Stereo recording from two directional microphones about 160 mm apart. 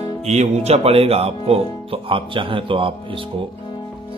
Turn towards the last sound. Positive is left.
turn(degrees=30)  # may be behind; listen again after turning